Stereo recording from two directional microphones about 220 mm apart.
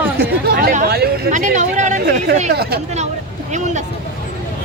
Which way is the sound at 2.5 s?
45° right (ahead or behind).